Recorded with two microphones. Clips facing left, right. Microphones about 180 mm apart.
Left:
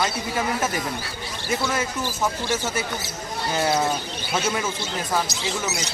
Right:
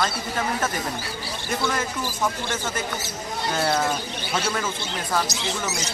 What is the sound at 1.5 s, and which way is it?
Speech, 5° left (ahead or behind).